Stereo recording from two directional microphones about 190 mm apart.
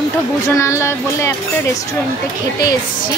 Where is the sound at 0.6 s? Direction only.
15° left (ahead or behind).